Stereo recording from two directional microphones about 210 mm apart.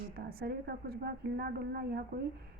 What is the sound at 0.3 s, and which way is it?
A woman's voice, 50° right (ahead or behind).